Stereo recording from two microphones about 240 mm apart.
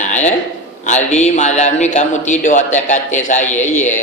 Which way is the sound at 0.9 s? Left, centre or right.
Left.